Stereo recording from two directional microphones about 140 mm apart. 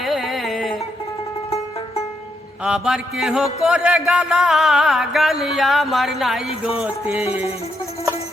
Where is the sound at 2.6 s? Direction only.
5° right (ahead or behind).